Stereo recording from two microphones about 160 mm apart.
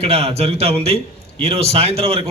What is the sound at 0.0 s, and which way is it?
A man's voice, 40° right (ahead or behind).